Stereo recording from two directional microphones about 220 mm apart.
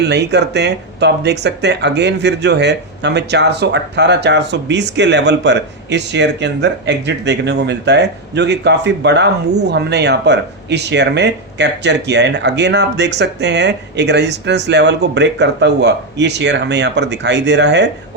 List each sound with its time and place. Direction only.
0.0 s speech: 50° right (ahead or behind)